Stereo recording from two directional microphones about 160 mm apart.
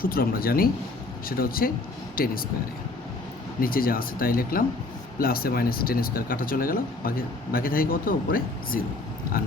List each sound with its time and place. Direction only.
0.0 s speech: 65° left (ahead or behind)
3.6 s speech: 65° left (ahead or behind)